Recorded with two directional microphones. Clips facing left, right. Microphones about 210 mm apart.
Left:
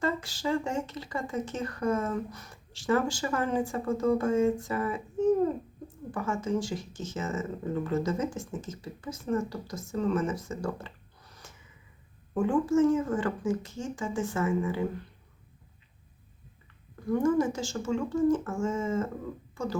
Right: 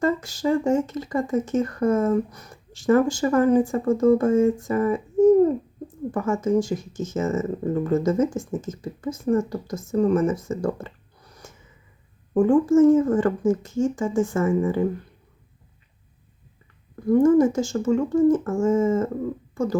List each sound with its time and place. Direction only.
0.0 s speech: 45° right (ahead or behind)
6.1 s speech: 45° right (ahead or behind)
12.3 s speech: 45° right (ahead or behind)
17.1 s speech: 45° right (ahead or behind)